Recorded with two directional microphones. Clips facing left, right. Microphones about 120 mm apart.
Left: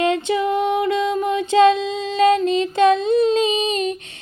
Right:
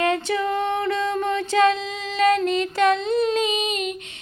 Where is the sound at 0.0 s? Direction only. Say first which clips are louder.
Left 3 dB; 20° left (ahead or behind).